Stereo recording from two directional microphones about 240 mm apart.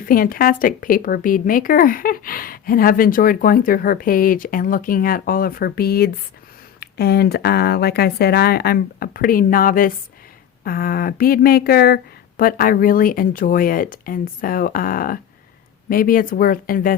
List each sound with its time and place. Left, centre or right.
0.0 s speech: left